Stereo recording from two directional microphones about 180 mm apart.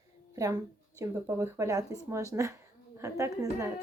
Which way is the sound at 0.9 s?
15° right (ahead or behind).